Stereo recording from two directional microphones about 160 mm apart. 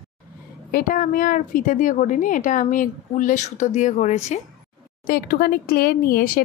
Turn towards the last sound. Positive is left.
turn(degrees=65)  # may be behind; listen again after turning